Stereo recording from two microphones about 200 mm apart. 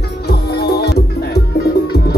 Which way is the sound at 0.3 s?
55° left (ahead or behind).